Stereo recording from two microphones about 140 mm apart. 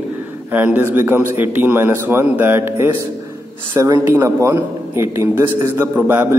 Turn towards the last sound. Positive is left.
turn(degrees=-15)  # may be behind; listen again after turning